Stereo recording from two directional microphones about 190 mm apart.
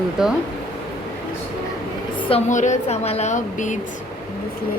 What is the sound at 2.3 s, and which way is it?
A woman's voice, 35° left (ahead or behind).